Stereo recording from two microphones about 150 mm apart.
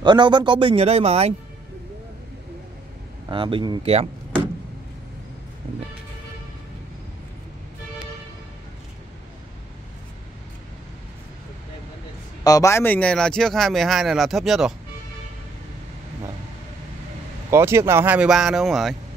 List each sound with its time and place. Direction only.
0.0 s speech: 30° right (ahead or behind)
3.3 s speech: 35° right (ahead or behind)
12.4 s speech: 20° left (ahead or behind); by 14.7 s centre (ahead or behind)
17.5 s speech: 15° right (ahead or behind); by 18.9 s centre (ahead or behind)